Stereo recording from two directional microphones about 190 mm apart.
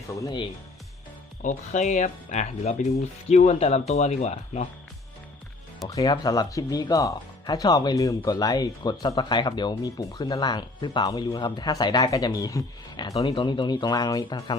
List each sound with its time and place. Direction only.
0.2 s speech: 20° left (ahead or behind)
1.4 s speech: 40° left (ahead or behind)
5.9 s speech: 20° left (ahead or behind)